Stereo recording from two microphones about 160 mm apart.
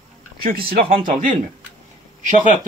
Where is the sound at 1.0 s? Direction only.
60° right (ahead or behind).